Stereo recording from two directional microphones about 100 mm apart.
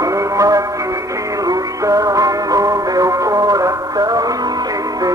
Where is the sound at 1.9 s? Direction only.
35° right (ahead or behind).